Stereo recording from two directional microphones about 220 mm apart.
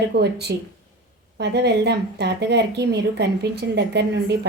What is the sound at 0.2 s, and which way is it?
Speech, 50° right (ahead or behind).